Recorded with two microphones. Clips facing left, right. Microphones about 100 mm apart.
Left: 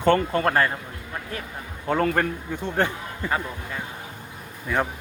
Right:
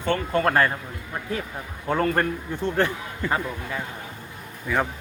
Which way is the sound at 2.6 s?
15° left (ahead or behind).